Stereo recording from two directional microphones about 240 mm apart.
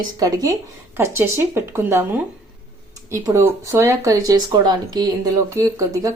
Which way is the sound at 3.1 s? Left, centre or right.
Centre.